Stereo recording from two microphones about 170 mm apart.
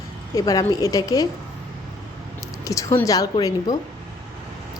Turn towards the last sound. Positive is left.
turn(degrees=20)  # may be behind; listen again after turning